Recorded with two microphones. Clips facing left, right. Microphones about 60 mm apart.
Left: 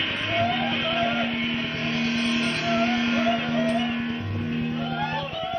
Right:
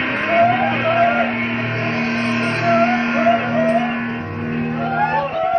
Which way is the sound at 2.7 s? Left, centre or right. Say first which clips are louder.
Right 9 dB; right.